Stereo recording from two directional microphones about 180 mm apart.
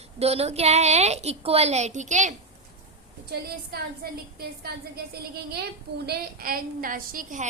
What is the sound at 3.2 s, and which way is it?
A woman's voice, 60° right (ahead or behind).